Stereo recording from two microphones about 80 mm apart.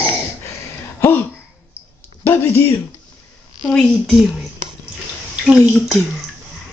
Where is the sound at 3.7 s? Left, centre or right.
Centre.